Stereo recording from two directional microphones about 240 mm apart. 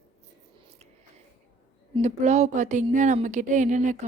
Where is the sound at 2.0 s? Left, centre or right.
Right.